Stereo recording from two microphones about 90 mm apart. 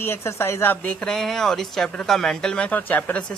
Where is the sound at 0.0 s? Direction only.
25° left (ahead or behind).